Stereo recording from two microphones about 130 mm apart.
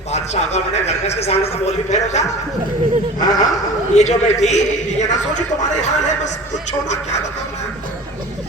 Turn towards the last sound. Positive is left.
turn(degrees=65)  # may be behind; listen again after turning